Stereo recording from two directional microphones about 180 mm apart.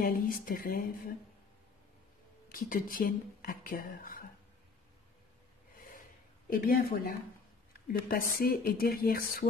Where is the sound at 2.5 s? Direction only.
50° left (ahead or behind).